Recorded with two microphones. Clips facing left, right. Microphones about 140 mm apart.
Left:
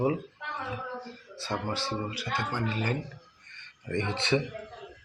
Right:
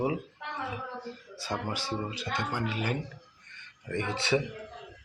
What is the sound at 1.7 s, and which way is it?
A man's voice, 15° right (ahead or behind).